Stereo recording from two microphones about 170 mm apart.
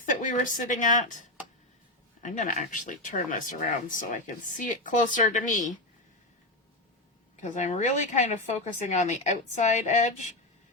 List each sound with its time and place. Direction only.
0.0 s a woman's voice: 50° left (ahead or behind)
2.2 s speech: 50° left (ahead or behind)
7.4 s speech: 45° left (ahead or behind)